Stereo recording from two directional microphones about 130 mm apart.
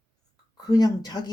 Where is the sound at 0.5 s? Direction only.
30° left (ahead or behind).